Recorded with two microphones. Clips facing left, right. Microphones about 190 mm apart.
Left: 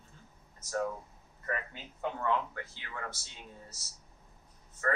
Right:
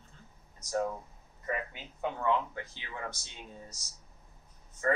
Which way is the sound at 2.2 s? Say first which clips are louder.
Right 2 dB; 20° right (ahead or behind).